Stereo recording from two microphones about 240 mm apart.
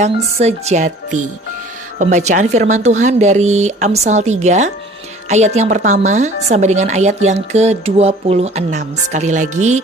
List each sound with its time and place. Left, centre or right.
0.0 s a woman's voice: right
2.0 s a woman's voice: right